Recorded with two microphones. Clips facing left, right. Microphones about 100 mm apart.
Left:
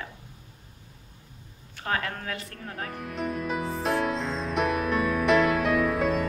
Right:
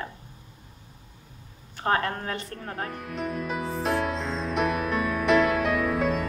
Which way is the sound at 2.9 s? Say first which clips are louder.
Left 4 dB; centre (ahead or behind).